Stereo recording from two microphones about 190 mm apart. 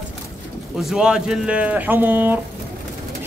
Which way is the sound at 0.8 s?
5° right (ahead or behind).